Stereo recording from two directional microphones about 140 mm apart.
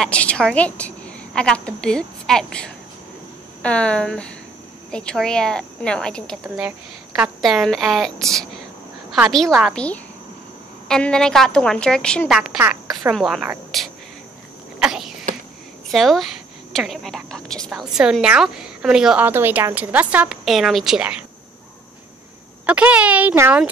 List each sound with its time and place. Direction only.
0.0 s a woman's voice: 10° left (ahead or behind)
6.4 s a woman's voice: 5° right (ahead or behind)
10.9 s speech: 5° left (ahead or behind)
13.7 s cricket: centre (ahead or behind)
14.8 s a sound: 5° right (ahead or behind)
15.9 s a woman's voice: centre (ahead or behind)
22.7 s a woman's voice: 10° right (ahead or behind)